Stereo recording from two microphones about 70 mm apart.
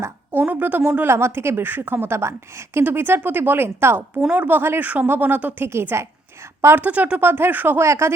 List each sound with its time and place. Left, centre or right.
0.3 s a woman's voice: right
1.0 s a woman's voice: right
4.2 s a woman's voice: right
6.7 s speech: right
7.2 s a woman's voice: right
7.8 s a woman's voice: right